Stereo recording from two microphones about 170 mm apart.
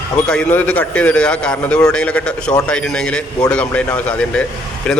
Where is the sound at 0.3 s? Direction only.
5° left (ahead or behind).